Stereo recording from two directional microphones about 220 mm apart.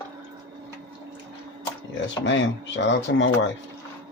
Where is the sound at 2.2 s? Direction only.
55° left (ahead or behind).